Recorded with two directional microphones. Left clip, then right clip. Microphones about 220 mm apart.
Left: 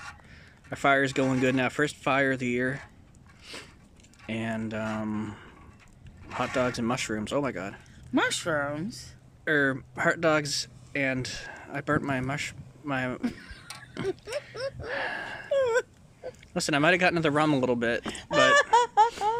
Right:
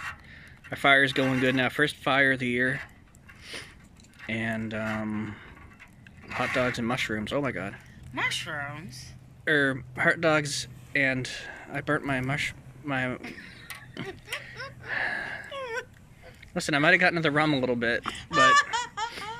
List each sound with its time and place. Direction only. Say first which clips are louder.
0.7 s speech: right 3 dB; 5° left (ahead or behind)
4.3 s speech: right 2 dB; 5° left (ahead or behind)
8.1 s speech: left 3 dB; 55° left (ahead or behind)
9.4 s speech: right 1 dB; centre (ahead or behind)
13.2 s a sound: left 5 dB; 55° left (ahead or behind)
14.0 s speech: left 9 dB; 5° left (ahead or behind)
14.5 s gasp: left 6 dB; 55° left (ahead or behind)
14.9 s speech: right 5 dB; 5° left (ahead or behind)
15.5 s whimper: left 10 dB; 55° left (ahead or behind)
16.5 s speech: right 2 dB; 5° left (ahead or behind)
18.0 s speech: right 2 dB; 50° left (ahead or behind)